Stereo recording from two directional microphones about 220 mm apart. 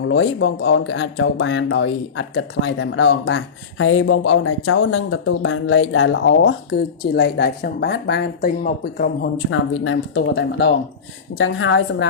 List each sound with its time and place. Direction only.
0.1 s speech: 55° left (ahead or behind)
9.5 s speech: 65° left (ahead or behind)